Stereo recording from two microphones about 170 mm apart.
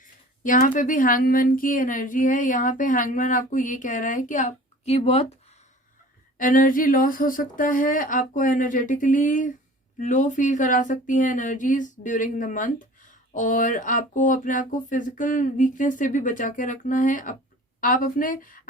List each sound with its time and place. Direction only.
0.4 s speech: 50° left (ahead or behind)
6.3 s speech: 50° left (ahead or behind)